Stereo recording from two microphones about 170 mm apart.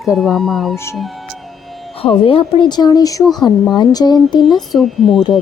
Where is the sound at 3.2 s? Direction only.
Centre (ahead or behind).